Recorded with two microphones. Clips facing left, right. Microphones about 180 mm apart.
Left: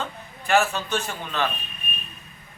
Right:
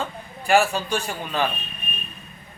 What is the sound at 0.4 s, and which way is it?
A man's voice, 10° right (ahead or behind).